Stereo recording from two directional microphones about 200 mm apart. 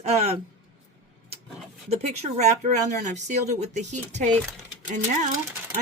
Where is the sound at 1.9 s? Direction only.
35° right (ahead or behind).